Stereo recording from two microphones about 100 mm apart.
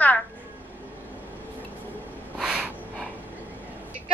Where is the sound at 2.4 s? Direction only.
10° right (ahead or behind).